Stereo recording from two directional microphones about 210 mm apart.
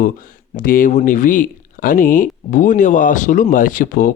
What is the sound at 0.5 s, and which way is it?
Speech, 40° left (ahead or behind).